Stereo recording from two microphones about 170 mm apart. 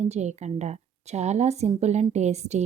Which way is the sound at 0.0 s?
40° right (ahead or behind).